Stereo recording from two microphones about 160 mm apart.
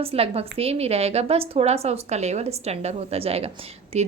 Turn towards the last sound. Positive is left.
turn(degrees=-40)  # may be behind; listen again after turning